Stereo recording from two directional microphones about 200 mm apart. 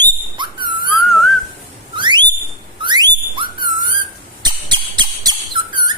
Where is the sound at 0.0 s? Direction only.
20° right (ahead or behind).